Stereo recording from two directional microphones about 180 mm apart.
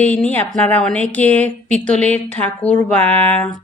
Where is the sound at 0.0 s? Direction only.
10° left (ahead or behind).